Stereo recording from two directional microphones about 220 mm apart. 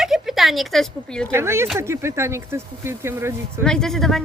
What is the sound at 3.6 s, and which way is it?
Speech, 5° left (ahead or behind).